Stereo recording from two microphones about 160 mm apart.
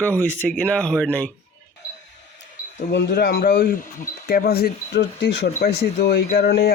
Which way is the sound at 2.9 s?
90° left.